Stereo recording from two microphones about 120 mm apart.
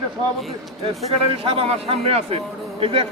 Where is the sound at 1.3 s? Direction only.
50° right (ahead or behind).